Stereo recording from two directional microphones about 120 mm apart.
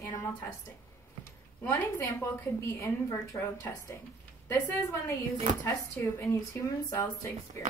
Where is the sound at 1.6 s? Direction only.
25° left (ahead or behind).